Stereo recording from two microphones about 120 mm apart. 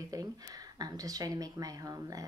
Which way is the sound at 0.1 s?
30° right (ahead or behind).